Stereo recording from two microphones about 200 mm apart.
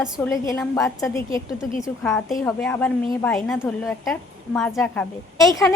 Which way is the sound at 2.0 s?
5° left (ahead or behind).